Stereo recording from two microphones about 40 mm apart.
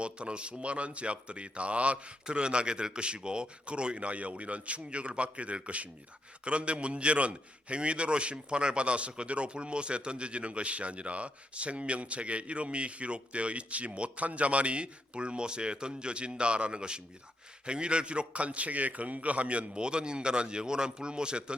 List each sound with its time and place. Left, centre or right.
0.0 s a man's voice: right